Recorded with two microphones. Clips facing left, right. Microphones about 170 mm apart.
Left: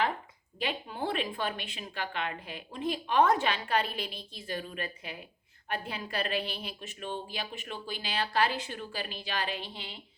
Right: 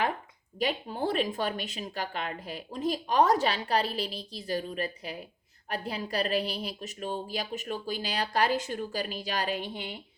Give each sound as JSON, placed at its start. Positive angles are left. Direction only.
{"t": 0.6, "sound": "a woman's voice", "side_deg": -40}